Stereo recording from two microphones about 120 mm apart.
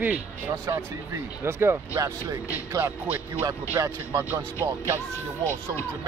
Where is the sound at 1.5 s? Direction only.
20° right (ahead or behind).